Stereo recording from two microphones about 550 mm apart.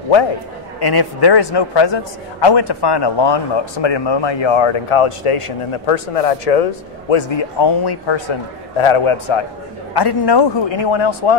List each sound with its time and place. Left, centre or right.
0.7 s speech: left
7.1 s a man's voice: left
9.9 s speech: left